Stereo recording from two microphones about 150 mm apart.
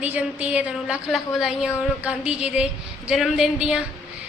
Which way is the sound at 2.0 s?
10° right (ahead or behind).